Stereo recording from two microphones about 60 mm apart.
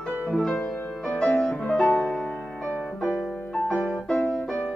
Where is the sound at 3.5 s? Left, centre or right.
Centre.